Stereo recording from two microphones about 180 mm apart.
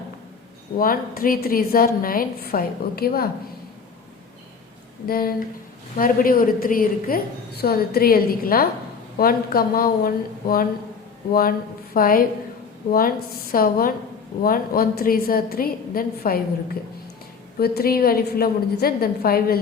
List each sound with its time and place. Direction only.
0.8 s a woman's voice: 50° left (ahead or behind)
5.0 s a woman's voice: 55° left (ahead or behind)
17.6 s a woman's voice: 60° left (ahead or behind)